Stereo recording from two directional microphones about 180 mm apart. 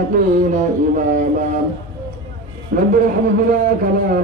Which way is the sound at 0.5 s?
45° right (ahead or behind).